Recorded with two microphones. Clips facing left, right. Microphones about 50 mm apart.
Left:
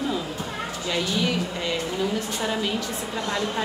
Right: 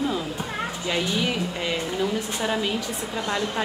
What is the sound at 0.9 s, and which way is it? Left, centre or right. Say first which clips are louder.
Speech: left 1 dB; centre.